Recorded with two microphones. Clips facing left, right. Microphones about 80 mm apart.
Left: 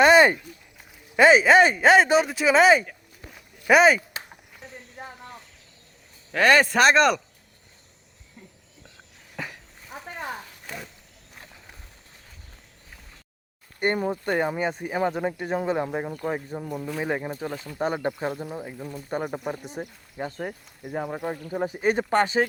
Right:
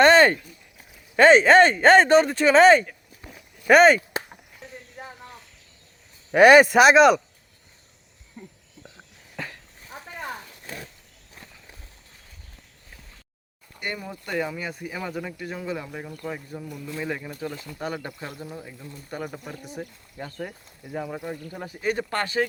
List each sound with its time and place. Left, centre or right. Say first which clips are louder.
0.0 s a sound: even; centre
1.1 s speech: right 2 dB; centre
4.9 s cricket: left 2 dB; centre
6.3 s speech: right 6 dB; centre
8.4 s a sound: right 6 dB; right
9.4 s a sound: even; centre
13.7 s speech: left 9 dB; left
16.2 s speech: left 5 dB; left
16.7 s speech: left 6 dB; left
17.0 s speech: left 2 dB; left